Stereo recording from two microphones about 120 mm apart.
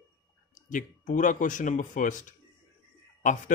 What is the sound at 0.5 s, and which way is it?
Speech, 90° left.